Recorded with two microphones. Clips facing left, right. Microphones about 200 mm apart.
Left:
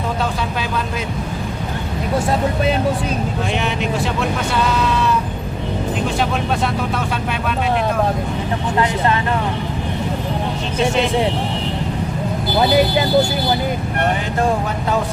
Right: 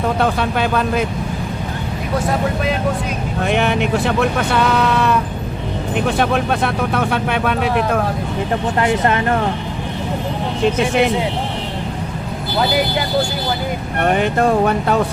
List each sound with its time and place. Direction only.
0.2 s speech: 60° right (ahead or behind)
3.4 s speech: 60° right (ahead or behind)